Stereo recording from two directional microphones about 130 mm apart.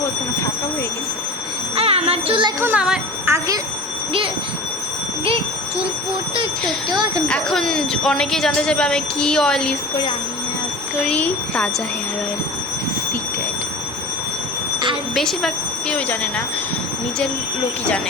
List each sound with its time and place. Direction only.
1.7 s music: 50° right (ahead or behind)
2.6 s speech: 10° right (ahead or behind)
3.2 s speech: 25° right (ahead or behind)
7.3 s speech: 5° left (ahead or behind)
11.1 s speech: 10° left (ahead or behind)
15.1 s speech: centre (ahead or behind)